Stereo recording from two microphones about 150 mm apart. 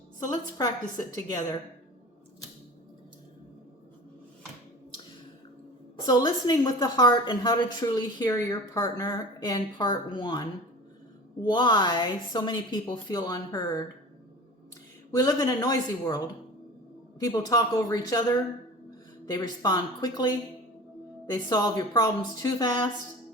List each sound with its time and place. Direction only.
1.1 s a woman's voice: 25° left (ahead or behind)
6.1 s a woman's voice: 25° left (ahead or behind)
15.1 s a woman's voice: 25° left (ahead or behind)